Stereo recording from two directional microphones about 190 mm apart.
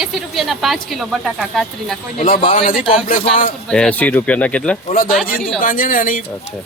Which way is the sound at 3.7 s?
5° left (ahead or behind).